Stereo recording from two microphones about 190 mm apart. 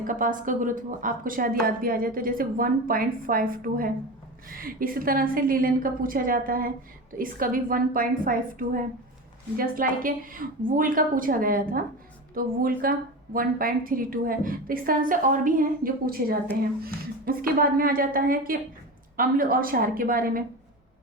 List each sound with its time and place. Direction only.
0.0 s a woman's voice: 45° right (ahead or behind)